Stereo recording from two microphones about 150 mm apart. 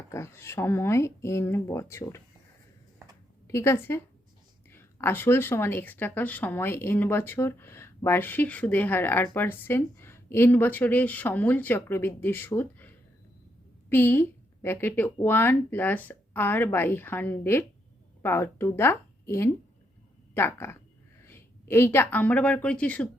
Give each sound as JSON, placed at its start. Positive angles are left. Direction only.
{"t": 0.1, "sound": "speech", "side_deg": 20}
{"t": 3.4, "sound": "a woman's voice", "side_deg": 20}
{"t": 13.9, "sound": "speech", "side_deg": 15}